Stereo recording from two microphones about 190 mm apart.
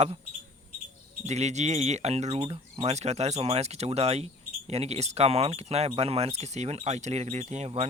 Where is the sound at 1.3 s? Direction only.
35° right (ahead or behind).